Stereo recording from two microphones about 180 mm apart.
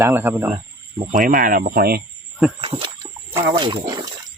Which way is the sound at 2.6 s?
30° right (ahead or behind).